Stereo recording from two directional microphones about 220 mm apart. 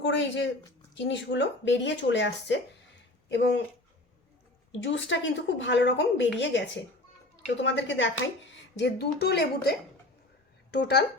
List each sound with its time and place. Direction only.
0.0 s speech: 55° left (ahead or behind)
4.7 s speech: 55° left (ahead or behind)